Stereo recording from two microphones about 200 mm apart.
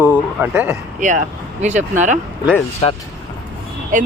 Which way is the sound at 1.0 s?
40° right (ahead or behind).